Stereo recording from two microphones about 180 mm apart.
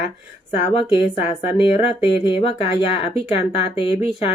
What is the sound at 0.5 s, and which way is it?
Speech, 30° left (ahead or behind).